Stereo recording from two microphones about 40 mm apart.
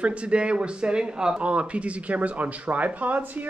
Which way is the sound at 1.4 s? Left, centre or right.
Right.